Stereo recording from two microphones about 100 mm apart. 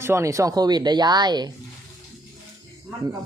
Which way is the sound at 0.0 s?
25° right (ahead or behind).